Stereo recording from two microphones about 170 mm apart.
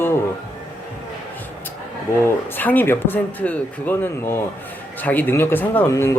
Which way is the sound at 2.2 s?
10° left (ahead or behind).